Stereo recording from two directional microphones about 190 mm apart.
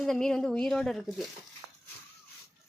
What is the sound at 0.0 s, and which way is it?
Speech, 5° left (ahead or behind).